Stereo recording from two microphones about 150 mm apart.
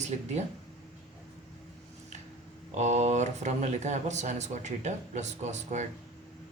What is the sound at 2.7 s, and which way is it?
Speech, 50° right (ahead or behind).